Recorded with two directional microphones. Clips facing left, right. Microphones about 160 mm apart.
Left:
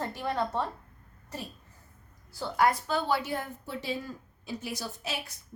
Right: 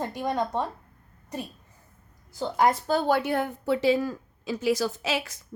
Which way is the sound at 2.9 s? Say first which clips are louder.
Right 6 dB; 45° right (ahead or behind).